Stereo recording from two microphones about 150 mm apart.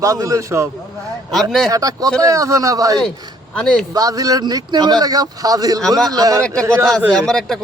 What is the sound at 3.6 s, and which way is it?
Speech, 5° left (ahead or behind).